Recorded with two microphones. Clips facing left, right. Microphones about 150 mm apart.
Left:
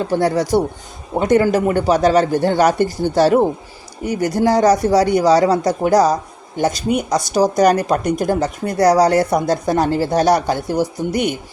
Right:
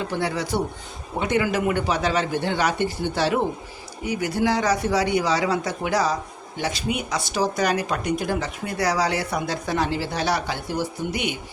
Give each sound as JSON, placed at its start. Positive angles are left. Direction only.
{"t": 0.0, "sound": "speech", "side_deg": 40}